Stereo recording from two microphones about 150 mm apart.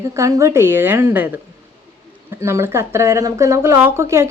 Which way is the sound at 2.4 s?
15° right (ahead or behind).